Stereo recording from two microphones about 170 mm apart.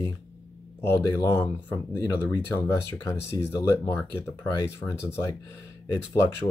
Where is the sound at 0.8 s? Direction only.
15° left (ahead or behind).